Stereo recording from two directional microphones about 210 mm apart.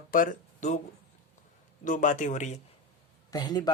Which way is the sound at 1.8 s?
35° left (ahead or behind).